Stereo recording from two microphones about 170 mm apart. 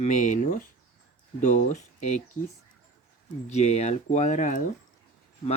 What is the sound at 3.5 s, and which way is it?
Speech, 40° left (ahead or behind).